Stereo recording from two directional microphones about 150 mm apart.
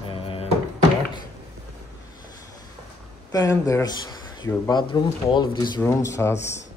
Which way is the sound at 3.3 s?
25° left (ahead or behind).